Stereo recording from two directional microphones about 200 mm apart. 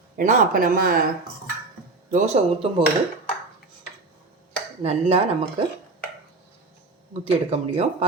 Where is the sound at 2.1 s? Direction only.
40° right (ahead or behind).